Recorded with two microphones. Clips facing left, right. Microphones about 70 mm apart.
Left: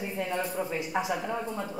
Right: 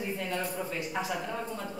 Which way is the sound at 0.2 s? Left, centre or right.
Centre.